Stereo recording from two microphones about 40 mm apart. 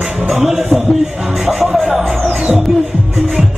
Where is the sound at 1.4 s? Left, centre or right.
Centre.